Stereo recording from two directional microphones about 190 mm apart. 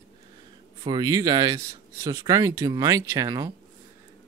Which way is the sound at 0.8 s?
20° right (ahead or behind).